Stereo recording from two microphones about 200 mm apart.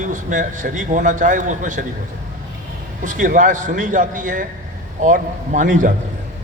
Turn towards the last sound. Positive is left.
turn(degrees=-40)  # may be behind; listen again after turning